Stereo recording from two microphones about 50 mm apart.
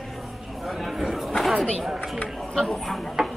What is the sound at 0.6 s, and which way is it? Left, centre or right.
A woman's voice, centre.